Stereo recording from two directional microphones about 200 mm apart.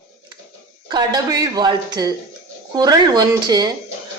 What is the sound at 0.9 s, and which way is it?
Speech, 20° right (ahead or behind).